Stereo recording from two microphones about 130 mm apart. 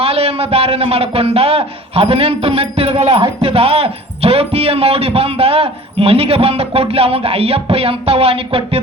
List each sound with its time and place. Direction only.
0.0 s a man's voice: 50° right (ahead or behind)